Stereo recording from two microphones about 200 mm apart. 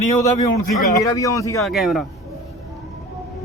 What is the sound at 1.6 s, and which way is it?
Speech, centre (ahead or behind).